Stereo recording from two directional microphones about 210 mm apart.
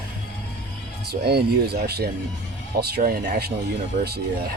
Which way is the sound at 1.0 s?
50° right (ahead or behind).